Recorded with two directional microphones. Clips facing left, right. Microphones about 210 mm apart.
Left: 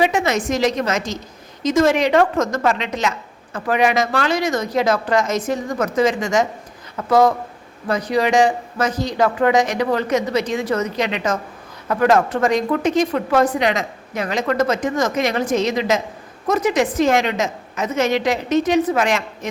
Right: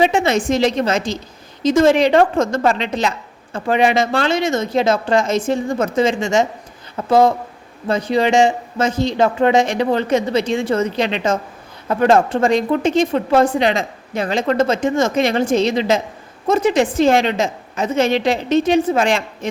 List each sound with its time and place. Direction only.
0.0 s a woman's voice: 30° right (ahead or behind)